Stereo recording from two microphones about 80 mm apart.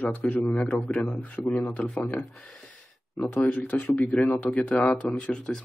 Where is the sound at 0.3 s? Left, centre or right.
Left.